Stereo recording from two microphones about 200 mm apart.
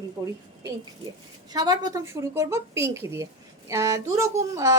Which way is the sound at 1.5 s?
20° right (ahead or behind).